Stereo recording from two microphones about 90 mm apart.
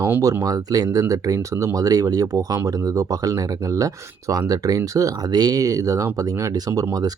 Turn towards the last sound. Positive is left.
turn(degrees=-40)  # may be behind; listen again after turning